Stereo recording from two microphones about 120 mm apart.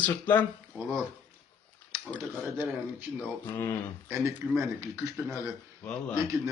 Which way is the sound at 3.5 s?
20° left (ahead or behind).